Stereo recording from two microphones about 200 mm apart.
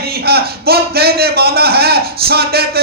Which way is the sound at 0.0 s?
50° right (ahead or behind).